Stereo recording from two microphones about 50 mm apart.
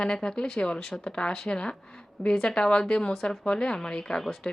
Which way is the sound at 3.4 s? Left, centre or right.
Centre.